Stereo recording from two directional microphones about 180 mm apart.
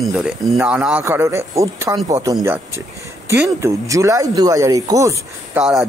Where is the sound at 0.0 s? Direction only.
5° right (ahead or behind).